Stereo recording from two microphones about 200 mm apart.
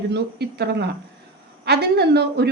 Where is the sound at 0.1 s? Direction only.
55° right (ahead or behind).